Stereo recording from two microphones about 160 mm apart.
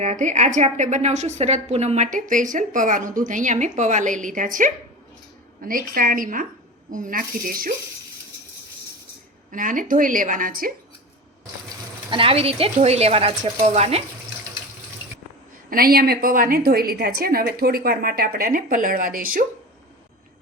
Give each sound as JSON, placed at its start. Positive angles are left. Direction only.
{"t": 0.0, "sound": "a woman's voice", "side_deg": -50}
{"t": 9.5, "sound": "a woman's voice", "side_deg": -55}
{"t": 12.1, "sound": "speech", "side_deg": -35}
{"t": 15.7, "sound": "a woman's voice", "side_deg": -70}